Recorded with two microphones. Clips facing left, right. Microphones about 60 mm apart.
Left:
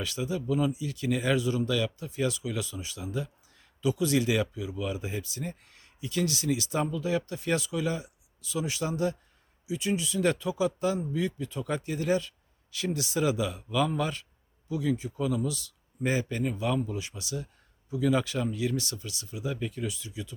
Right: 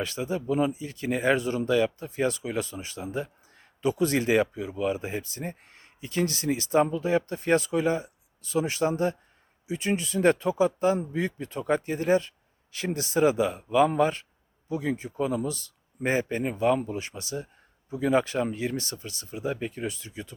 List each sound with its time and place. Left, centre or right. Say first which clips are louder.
0.0 s speech: right 2 dB; right